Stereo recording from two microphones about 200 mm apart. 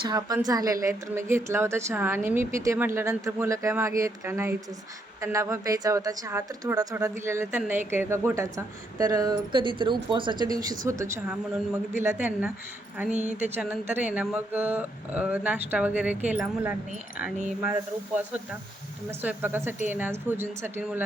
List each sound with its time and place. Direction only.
0.0 s a woman's voice: 20° right (ahead or behind)
13.1 s speech: 35° right (ahead or behind)
13.4 s a woman's voice: 10° right (ahead or behind)
19.2 s a woman's voice: 10° right (ahead or behind)